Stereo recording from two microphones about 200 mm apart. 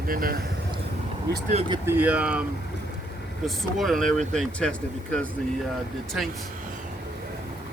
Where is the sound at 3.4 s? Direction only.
Centre (ahead or behind).